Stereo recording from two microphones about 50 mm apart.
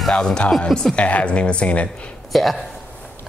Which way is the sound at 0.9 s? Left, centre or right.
Left.